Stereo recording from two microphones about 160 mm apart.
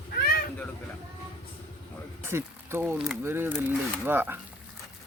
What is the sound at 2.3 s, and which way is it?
Speech, 15° right (ahead or behind).